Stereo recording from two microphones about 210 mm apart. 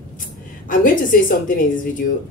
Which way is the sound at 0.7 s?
40° left (ahead or behind).